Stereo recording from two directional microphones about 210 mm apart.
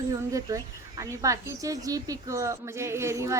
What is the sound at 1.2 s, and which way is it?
Speech, 15° right (ahead or behind).